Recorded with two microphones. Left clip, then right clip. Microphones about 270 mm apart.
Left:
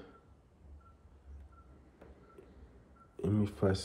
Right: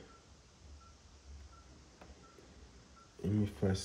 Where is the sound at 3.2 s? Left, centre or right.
Centre.